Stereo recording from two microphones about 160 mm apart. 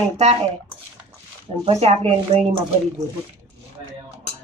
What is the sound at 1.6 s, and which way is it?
Speech, 40° right (ahead or behind).